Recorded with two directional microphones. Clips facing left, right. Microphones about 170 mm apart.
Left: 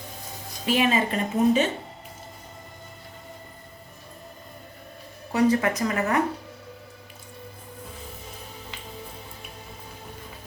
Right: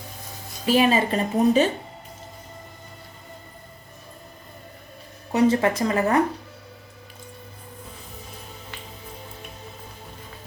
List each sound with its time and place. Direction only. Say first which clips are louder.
0.7 s a woman's voice: right 3 dB; 35° right (ahead or behind)
5.3 s speech: right 2 dB; 25° right (ahead or behind)